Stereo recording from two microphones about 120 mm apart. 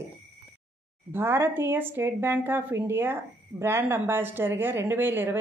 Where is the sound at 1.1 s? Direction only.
20° right (ahead or behind).